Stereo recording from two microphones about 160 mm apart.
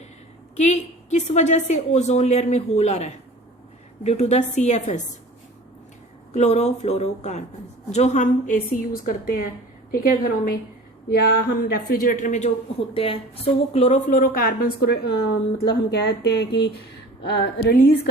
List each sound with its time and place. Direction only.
0.5 s a woman's voice: 45° left (ahead or behind)
6.3 s a woman's voice: 45° left (ahead or behind); by 9.4 s 60° left (ahead or behind)
11.1 s speech: 90° left; by 12.5 s 50° left (ahead or behind)
12.9 s a woman's voice: 35° left (ahead or behind); by 18.1 s 70° left (ahead or behind)